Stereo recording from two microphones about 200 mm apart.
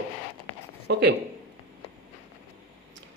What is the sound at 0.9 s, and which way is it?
Speech, 55° right (ahead or behind).